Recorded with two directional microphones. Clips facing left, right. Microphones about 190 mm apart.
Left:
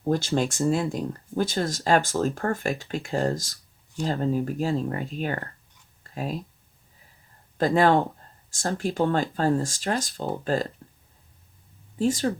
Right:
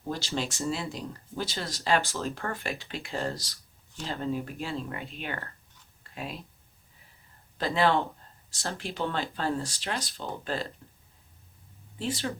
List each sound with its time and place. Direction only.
0.0 s speech: 50° left (ahead or behind)
6.0 s a sound: 40° left (ahead or behind)
7.6 s speech: 45° left (ahead or behind)
11.9 s speech: 45° left (ahead or behind)